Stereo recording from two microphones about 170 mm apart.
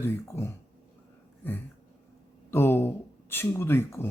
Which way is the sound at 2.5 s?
15° left (ahead or behind).